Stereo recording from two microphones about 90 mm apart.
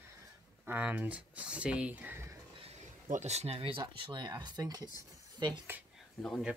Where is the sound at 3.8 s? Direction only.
60° right (ahead or behind).